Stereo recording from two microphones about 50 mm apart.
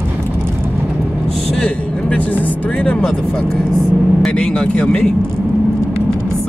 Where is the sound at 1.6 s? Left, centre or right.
Left.